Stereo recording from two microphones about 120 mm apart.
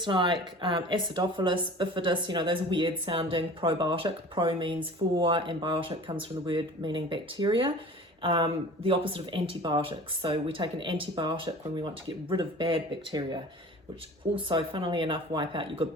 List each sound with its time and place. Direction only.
0.0 s speech: 40° right (ahead or behind)